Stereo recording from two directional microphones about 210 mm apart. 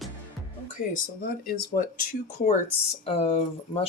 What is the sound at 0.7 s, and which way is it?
Speech, 40° left (ahead or behind).